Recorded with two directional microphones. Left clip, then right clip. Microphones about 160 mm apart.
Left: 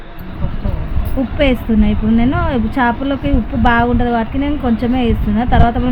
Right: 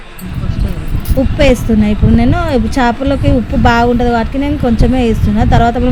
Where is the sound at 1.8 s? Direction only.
25° right (ahead or behind).